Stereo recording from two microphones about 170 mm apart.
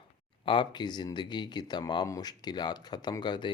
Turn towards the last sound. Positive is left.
turn(degrees=25)  # may be behind; listen again after turning